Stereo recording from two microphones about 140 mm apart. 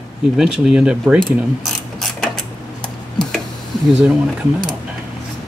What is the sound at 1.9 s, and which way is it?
Mechanisms, centre (ahead or behind).